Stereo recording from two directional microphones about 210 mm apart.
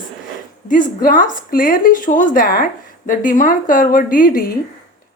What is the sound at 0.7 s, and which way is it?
A woman's voice, 40° left (ahead or behind).